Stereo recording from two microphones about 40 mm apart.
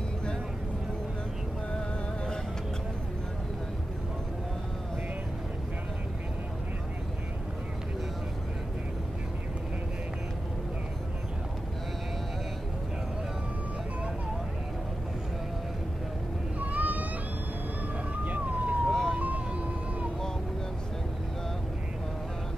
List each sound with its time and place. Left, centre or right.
16.5 s a sound: right
18.1 s police car: right
18.9 s vehicle: centre
19.1 s vehicle: right